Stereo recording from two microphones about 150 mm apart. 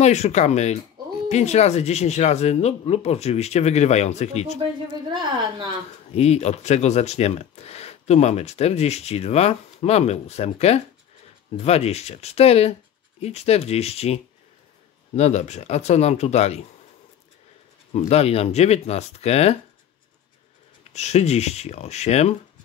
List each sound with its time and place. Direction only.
0.0 s speech: 50° left (ahead or behind)
6.1 s speech: 45° left (ahead or behind)
17.9 s speech: 45° left (ahead or behind)
20.9 s speech: 50° left (ahead or behind)